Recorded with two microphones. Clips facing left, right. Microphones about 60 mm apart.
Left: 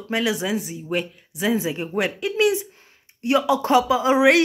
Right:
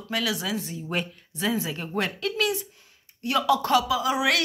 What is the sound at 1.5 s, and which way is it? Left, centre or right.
Speech, centre.